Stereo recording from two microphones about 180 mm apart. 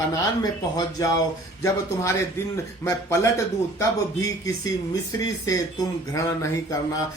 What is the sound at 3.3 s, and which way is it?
Speech, 15° left (ahead or behind).